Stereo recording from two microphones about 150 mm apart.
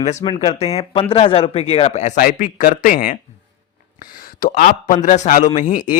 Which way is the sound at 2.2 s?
70° left (ahead or behind).